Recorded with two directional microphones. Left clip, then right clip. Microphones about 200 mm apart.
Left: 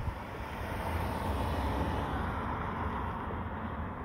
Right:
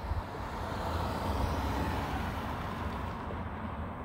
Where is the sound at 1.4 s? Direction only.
Centre (ahead or behind); by 3.9 s 40° right (ahead or behind).